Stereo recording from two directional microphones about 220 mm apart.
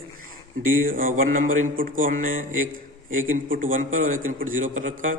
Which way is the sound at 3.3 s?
40° right (ahead or behind).